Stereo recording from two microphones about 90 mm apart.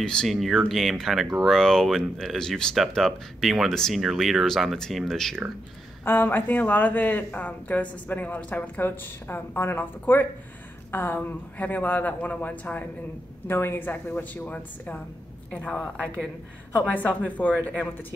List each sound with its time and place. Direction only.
0.0 s speech: 5° left (ahead or behind)
6.0 s speech: 25° left (ahead or behind)